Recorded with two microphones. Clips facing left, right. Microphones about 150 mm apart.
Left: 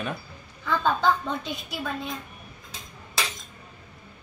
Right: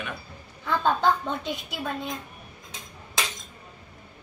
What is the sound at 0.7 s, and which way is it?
A woman's voice, centre (ahead or behind).